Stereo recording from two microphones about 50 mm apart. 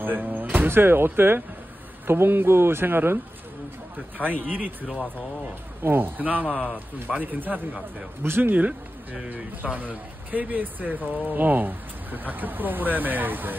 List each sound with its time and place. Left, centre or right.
0.0 s a man's voice: right
4.2 s speech: right
5.8 s a man's voice: right
8.2 s speech: right